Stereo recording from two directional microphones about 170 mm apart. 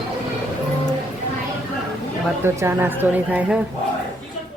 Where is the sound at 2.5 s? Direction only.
15° right (ahead or behind).